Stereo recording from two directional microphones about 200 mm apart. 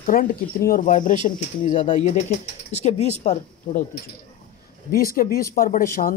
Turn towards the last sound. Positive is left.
turn(degrees=45)  # may be behind; listen again after turning